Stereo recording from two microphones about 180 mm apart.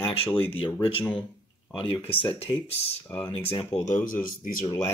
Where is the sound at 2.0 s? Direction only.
10° left (ahead or behind).